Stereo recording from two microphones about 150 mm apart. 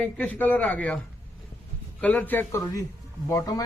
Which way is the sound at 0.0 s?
10° left (ahead or behind).